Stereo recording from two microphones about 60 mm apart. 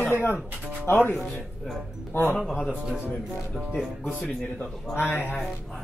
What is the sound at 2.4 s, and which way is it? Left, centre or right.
Speech, centre.